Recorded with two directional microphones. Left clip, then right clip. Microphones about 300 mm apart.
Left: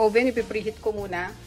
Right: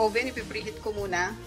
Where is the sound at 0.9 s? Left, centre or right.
Centre.